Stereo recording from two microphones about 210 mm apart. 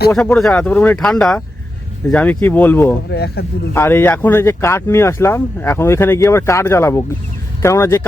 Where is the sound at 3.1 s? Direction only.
50° left (ahead or behind).